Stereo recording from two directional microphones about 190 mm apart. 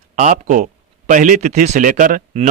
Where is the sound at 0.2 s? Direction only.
40° right (ahead or behind).